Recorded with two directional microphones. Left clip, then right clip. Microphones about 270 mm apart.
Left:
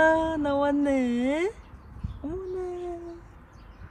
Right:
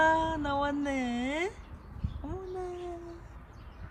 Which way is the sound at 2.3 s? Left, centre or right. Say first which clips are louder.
Left 6 dB; centre.